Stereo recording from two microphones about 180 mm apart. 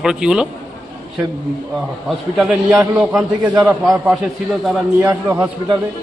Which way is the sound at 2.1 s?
Centre (ahead or behind).